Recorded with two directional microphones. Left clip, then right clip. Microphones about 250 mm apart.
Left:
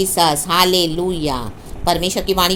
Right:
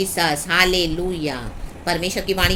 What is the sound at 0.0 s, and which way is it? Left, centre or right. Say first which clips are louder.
A woman's voice: left 5 dB; centre.